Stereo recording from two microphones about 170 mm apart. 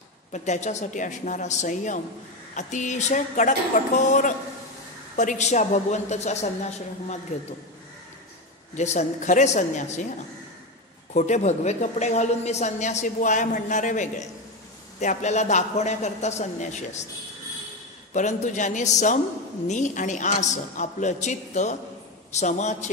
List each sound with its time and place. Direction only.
0.3 s a woman's voice: 45° left (ahead or behind)
8.7 s a woman's voice: 45° left (ahead or behind)
11.1 s a woman's voice: 45° left (ahead or behind)
18.1 s a woman's voice: 45° left (ahead or behind)